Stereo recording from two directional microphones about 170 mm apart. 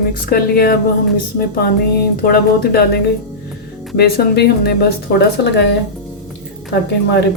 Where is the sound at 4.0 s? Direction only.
65° left (ahead or behind).